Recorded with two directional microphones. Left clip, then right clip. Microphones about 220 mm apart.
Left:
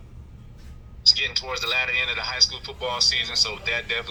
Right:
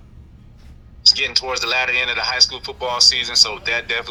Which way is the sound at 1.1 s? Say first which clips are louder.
Right 5 dB; 40° right (ahead or behind).